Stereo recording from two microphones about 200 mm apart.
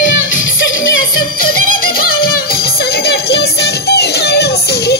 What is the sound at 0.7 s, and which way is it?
Music, 85° left.